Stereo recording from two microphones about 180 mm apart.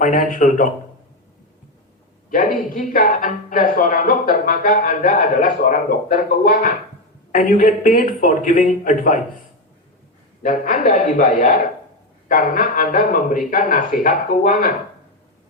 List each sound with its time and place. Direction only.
0.0 s speech: 45° left (ahead or behind)
2.3 s speech: 45° left (ahead or behind)
10.4 s speech: 45° left (ahead or behind)